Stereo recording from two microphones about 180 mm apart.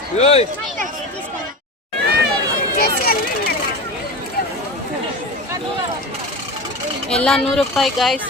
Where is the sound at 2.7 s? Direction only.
55° left (ahead or behind).